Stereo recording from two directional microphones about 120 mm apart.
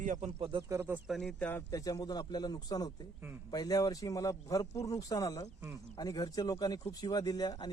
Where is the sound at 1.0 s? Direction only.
Centre (ahead or behind).